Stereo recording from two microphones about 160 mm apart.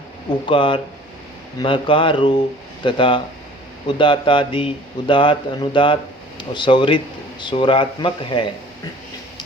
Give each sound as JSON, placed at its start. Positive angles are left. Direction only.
{"t": 0.3, "sound": "speech", "side_deg": 30}